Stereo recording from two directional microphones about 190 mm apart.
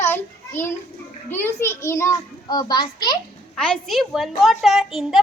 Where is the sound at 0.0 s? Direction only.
10° left (ahead or behind).